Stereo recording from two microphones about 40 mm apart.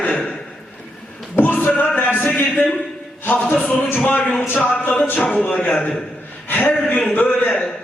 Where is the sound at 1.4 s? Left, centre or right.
Left.